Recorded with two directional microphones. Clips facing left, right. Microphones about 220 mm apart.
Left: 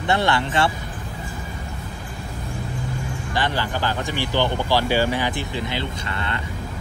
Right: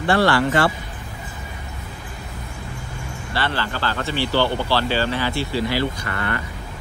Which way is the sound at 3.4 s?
15° left (ahead or behind).